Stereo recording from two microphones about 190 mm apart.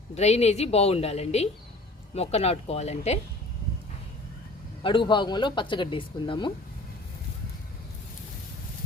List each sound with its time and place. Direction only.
0.1 s a woman's voice: 35° left (ahead or behind)
4.8 s speech: 25° left (ahead or behind)